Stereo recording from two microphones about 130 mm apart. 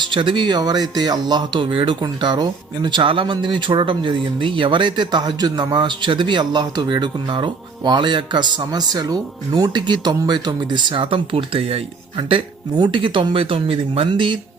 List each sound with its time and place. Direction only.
0.0 s speech: 40° right (ahead or behind)